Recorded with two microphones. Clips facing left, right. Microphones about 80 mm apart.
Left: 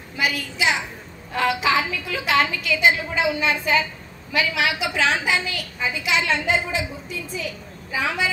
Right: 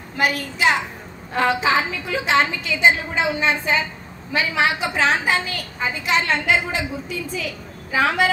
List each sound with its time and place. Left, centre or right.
0.2 s a child's voice: right
1.3 s a woman's voice: right
6.4 s a woman's voice: right
7.9 s a woman's voice: right